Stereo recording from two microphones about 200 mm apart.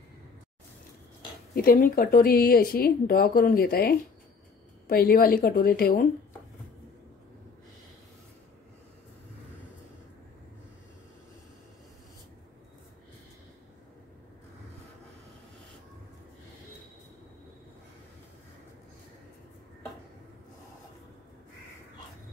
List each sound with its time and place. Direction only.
1.5 s a woman's voice: 45° left (ahead or behind)